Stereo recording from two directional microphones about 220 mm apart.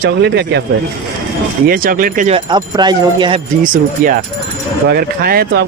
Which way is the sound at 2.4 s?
20° right (ahead or behind).